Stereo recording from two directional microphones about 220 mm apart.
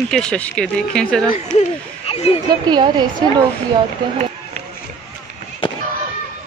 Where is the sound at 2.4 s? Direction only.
20° right (ahead or behind).